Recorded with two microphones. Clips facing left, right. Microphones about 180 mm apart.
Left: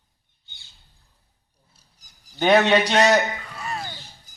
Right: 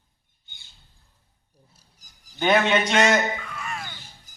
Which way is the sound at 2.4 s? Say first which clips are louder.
Left 3 dB; 35° left (ahead or behind).